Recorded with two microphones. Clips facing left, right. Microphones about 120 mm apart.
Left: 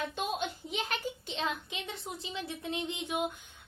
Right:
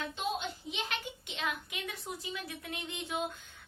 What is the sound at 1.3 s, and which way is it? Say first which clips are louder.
Speech: left 1 dB; 30° left (ahead or behind).